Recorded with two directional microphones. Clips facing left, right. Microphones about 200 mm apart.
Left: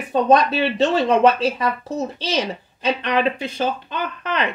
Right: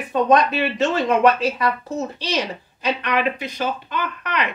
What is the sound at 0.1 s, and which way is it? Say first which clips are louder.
A woman's voice: left 1 dB; 30° left (ahead or behind).